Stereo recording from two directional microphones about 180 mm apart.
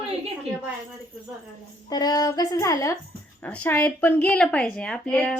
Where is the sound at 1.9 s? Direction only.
20° left (ahead or behind).